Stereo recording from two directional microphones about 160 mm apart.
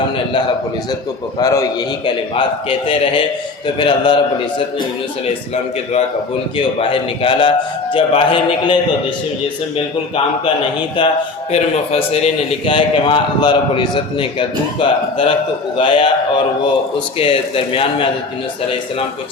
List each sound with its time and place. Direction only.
1.4 s a man's voice: 20° left (ahead or behind)
2.3 s a man's voice: 35° left (ahead or behind)
6.7 s a man's voice: 35° left (ahead or behind)
11.5 s a man's voice: 40° left (ahead or behind)
17.2 s a man's voice: 35° left (ahead or behind)